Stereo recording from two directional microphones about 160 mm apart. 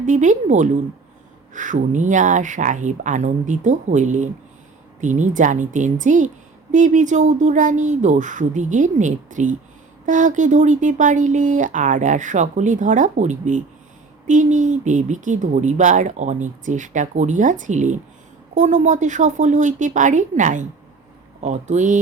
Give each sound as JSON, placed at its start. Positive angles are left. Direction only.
{"t": 0.0, "sound": "a woman's voice", "side_deg": -50}